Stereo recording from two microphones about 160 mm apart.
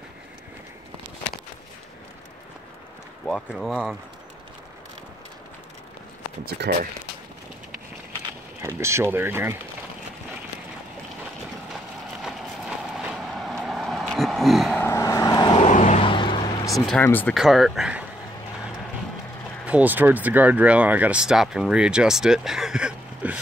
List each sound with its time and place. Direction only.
3.3 s speech: centre (ahead or behind)
6.4 s speech: 75° right (ahead or behind)
8.6 s speech: 15° right (ahead or behind)
12.2 s vehicle: 5° right (ahead or behind)
14.8 s vehicle: 20° left (ahead or behind)
15.5 s vehicle: 45° left (ahead or behind)
16.1 s vehicle: 30° left (ahead or behind)
16.7 s speech: 5° left (ahead or behind)
17.4 s speech: centre (ahead or behind)
19.6 s speech: 10° right (ahead or behind)